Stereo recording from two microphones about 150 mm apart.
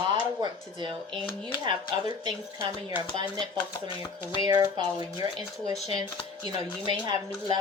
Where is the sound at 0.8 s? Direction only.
30° right (ahead or behind).